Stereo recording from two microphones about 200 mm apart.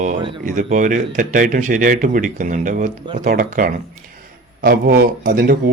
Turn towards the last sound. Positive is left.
turn(degrees=-45)  # may be behind; listen again after turning